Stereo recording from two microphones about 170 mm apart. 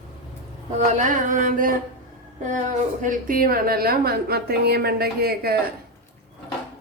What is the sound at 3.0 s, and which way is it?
A woman's voice, 55° right (ahead or behind).